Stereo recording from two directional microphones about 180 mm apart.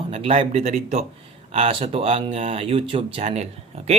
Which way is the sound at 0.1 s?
35° right (ahead or behind).